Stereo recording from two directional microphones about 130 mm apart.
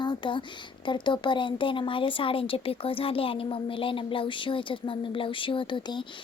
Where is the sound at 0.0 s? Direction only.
35° left (ahead or behind).